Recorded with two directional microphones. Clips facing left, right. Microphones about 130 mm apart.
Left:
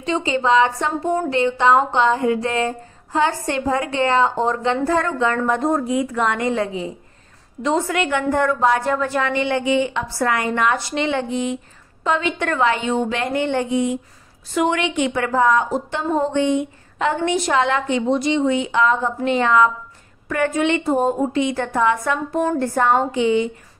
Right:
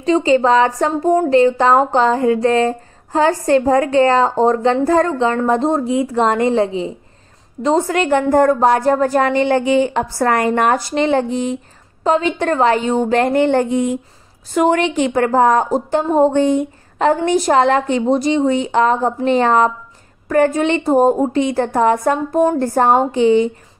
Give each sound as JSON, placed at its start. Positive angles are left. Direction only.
{"t": 0.0, "sound": "a woman's voice", "side_deg": -40}